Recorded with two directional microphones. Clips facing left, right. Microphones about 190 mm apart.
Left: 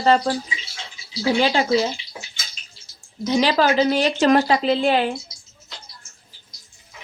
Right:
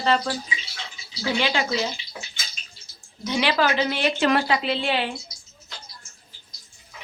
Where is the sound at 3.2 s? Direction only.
40° left (ahead or behind).